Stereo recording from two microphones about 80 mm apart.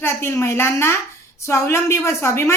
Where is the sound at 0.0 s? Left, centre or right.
Left.